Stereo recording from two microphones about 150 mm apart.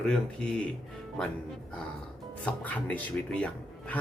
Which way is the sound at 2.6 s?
10° left (ahead or behind).